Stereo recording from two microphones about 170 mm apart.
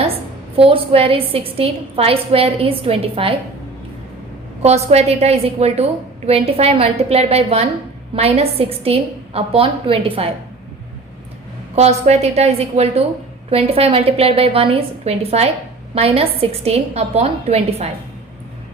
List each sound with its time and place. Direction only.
0.5 s a woman's voice: 35° right (ahead or behind)
4.6 s a woman's voice: 40° right (ahead or behind)
11.7 s a woman's voice: 40° right (ahead or behind)